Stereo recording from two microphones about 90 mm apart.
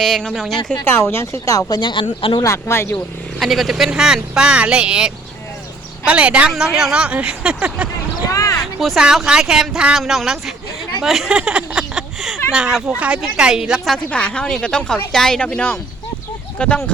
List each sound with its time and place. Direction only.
0.0 s a woman's voice: 5° left (ahead or behind)
0.9 s speech: 25° left (ahead or behind); by 2.4 s 65° left (ahead or behind)
2.4 s speech: 30° left (ahead or behind)
3.4 s speech: centre (ahead or behind)
8.3 s speech: 40° left (ahead or behind)
8.6 s a woman's voice: centre (ahead or behind)
13.9 s a woman's voice: 10° left (ahead or behind)